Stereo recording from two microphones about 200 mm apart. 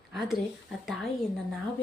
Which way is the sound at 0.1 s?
Centre (ahead or behind).